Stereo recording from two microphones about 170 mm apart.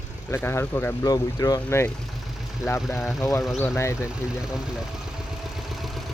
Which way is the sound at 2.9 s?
Centre (ahead or behind).